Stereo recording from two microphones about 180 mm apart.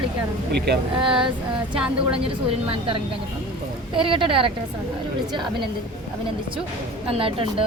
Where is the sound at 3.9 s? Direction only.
30° right (ahead or behind).